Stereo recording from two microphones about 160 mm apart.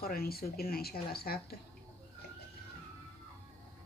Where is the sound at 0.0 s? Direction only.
70° left (ahead or behind).